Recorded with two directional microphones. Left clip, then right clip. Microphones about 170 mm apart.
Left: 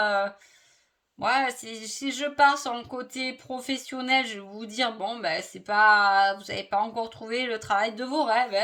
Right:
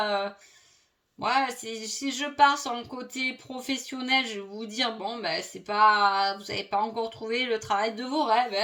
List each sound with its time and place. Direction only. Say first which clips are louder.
0.0 s speech: left 3 dB; 40° left (ahead or behind)